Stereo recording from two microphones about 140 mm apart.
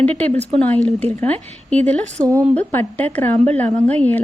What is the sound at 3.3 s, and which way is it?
Speech, 50° right (ahead or behind).